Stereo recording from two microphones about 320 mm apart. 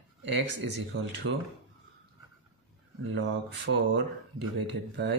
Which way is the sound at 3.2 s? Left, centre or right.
Right.